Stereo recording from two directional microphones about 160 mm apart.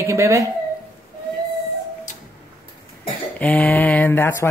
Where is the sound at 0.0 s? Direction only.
20° right (ahead or behind).